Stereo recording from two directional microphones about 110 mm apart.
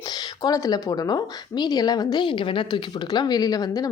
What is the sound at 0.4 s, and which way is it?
A woman's voice, 35° left (ahead or behind).